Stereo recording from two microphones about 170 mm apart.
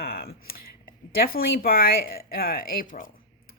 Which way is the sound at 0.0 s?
65° left (ahead or behind).